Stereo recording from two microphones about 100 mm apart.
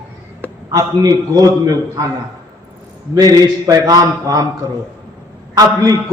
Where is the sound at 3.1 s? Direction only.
40° right (ahead or behind).